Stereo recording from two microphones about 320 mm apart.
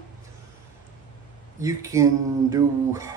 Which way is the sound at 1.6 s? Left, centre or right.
Centre.